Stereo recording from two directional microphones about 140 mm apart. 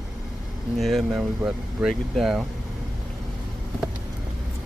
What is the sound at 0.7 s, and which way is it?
Speech, centre (ahead or behind).